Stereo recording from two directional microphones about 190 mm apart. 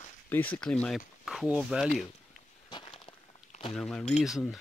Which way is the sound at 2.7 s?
25° left (ahead or behind).